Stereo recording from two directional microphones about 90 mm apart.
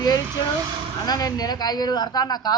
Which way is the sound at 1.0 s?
45° left (ahead or behind).